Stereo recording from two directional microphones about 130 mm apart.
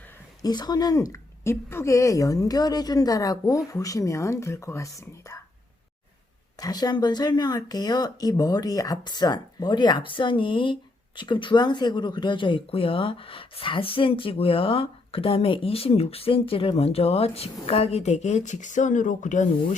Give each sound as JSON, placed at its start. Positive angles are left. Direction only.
{"t": 0.4, "sound": "speech", "side_deg": 30}
{"t": 6.6, "sound": "speech", "side_deg": 30}